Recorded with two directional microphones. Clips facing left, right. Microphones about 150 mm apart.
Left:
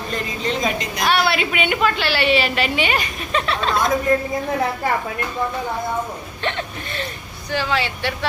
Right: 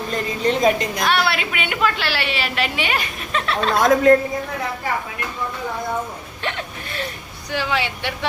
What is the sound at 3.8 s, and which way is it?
Speech, 90° right.